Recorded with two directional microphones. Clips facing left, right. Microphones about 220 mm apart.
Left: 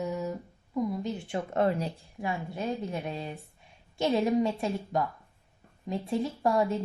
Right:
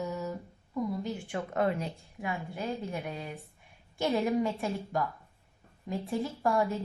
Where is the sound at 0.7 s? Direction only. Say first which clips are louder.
Left 2 dB; 25° left (ahead or behind).